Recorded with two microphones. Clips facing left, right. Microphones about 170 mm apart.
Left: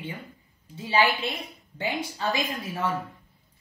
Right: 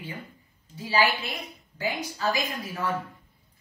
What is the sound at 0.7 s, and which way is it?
A woman's voice, 25° left (ahead or behind).